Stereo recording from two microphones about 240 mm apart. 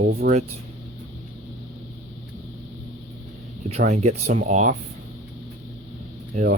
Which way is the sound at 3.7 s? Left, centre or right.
Right.